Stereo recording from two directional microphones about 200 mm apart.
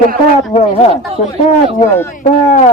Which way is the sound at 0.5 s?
30° left (ahead or behind).